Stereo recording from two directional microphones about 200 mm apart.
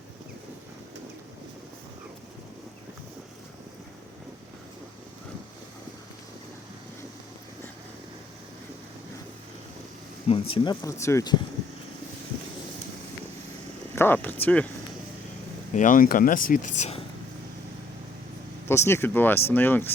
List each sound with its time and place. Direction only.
10.2 s speech: 25° left (ahead or behind)
13.9 s speech: 10° left (ahead or behind)
15.7 s speech: 40° left (ahead or behind)
18.7 s speech: 15° left (ahead or behind)